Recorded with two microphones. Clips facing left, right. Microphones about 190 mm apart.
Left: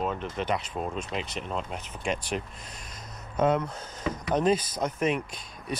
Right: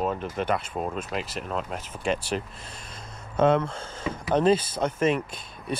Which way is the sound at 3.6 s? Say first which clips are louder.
Right 1 dB; 25° right (ahead or behind).